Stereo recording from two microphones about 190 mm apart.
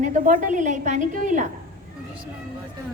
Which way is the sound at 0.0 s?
40° right (ahead or behind).